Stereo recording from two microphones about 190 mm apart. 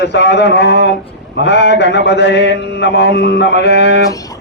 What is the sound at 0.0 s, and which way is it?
A man's voice, 65° left (ahead or behind).